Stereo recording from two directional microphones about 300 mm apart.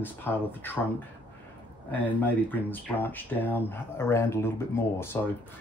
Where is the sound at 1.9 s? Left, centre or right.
Centre.